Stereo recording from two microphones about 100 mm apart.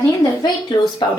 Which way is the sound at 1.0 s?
50° left (ahead or behind).